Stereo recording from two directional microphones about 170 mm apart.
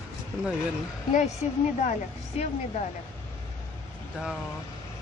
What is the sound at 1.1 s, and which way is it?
Speech, 45° left (ahead or behind).